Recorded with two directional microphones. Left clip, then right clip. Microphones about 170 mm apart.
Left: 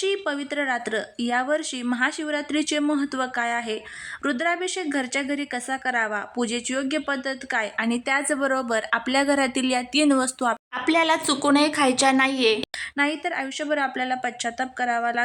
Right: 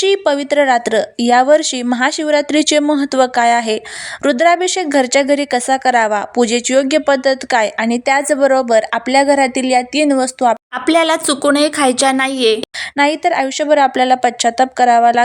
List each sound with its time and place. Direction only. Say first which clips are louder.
0.0 s speech: right 12 dB; 40° right (ahead or behind); by 12.5 s 20° right (ahead or behind)
13.0 s speech: right 12 dB; 40° right (ahead or behind)